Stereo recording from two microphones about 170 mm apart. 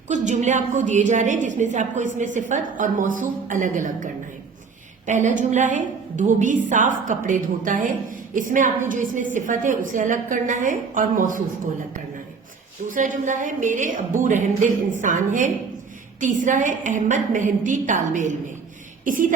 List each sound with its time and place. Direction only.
0.1 s a woman's voice: 45° right (ahead or behind)
12.9 s a woman's voice: 50° right (ahead or behind)
19.0 s cough: 50° right (ahead or behind)